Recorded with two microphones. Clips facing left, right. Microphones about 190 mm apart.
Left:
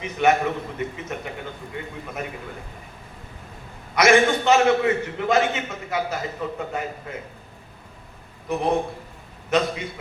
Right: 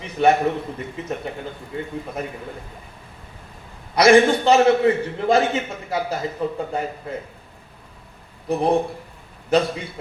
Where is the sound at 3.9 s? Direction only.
35° right (ahead or behind).